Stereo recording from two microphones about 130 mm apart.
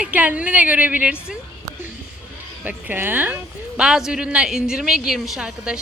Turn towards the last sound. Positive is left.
turn(degrees=-5)  # may be behind; listen again after turning